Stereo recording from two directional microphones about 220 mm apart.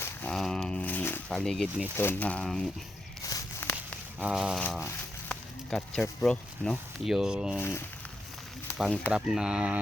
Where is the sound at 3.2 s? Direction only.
15° left (ahead or behind).